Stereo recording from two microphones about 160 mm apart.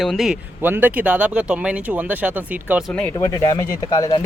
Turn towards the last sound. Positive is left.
turn(degrees=25)  # may be behind; listen again after turning